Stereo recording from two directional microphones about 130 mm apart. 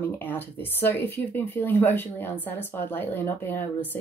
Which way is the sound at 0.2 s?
15° left (ahead or behind).